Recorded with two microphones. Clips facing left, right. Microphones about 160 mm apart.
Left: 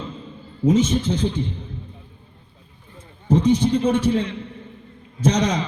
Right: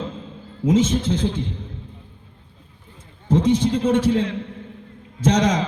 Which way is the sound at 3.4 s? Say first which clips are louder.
Left 1 dB; 90° right.